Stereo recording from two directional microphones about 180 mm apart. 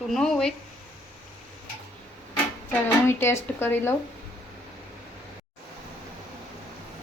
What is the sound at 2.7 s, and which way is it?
Speech, 15° left (ahead or behind).